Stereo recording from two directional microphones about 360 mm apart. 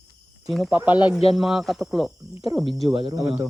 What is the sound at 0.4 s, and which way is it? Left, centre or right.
Speech, centre.